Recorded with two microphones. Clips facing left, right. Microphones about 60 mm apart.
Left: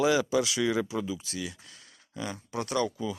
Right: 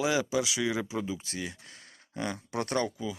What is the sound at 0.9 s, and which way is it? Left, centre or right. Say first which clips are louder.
Speech: left 1 dB; right.